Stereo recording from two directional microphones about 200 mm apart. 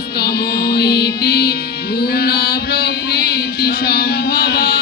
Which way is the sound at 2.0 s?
50° left (ahead or behind).